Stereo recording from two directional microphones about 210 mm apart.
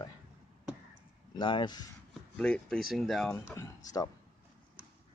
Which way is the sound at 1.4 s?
20° left (ahead or behind).